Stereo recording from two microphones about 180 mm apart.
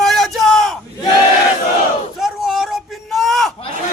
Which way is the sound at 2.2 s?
Centre (ahead or behind).